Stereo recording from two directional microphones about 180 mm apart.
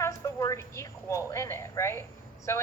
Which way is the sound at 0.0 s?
15° left (ahead or behind).